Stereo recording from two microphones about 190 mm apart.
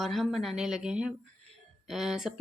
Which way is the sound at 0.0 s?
Centre (ahead or behind).